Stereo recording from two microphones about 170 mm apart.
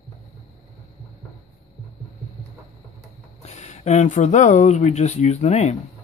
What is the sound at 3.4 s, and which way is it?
Speech, 40° left (ahead or behind).